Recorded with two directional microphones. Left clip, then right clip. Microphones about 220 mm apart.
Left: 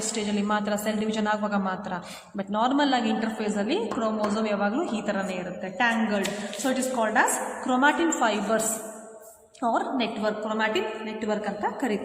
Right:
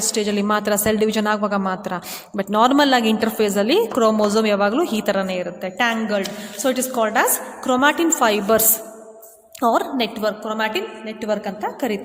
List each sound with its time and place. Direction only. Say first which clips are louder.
0.1 s a woman's voice: right 7 dB; 40° right (ahead or behind)
9.6 s a woman's voice: right 7 dB; 45° right (ahead or behind)